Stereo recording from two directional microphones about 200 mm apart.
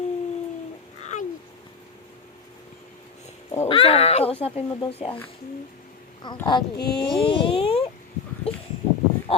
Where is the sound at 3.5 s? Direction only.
30° left (ahead or behind).